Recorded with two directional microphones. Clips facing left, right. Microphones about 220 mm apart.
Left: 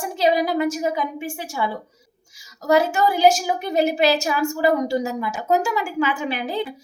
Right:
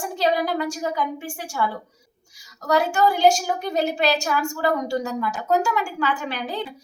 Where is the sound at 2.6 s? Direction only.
20° left (ahead or behind).